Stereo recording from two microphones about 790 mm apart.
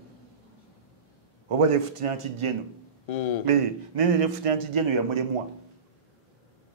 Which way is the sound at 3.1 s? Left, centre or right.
Left.